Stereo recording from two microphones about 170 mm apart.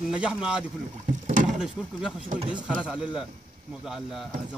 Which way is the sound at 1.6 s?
5° right (ahead or behind).